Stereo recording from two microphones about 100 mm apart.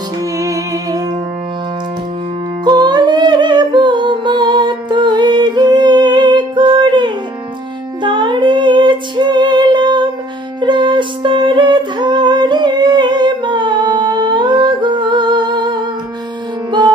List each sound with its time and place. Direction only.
0.2 s music: 35° right (ahead or behind)
2.6 s music: 45° right (ahead or behind)